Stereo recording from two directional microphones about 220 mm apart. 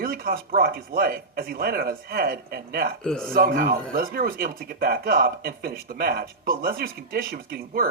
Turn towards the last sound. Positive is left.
turn(degrees=-40)  # may be behind; listen again after turning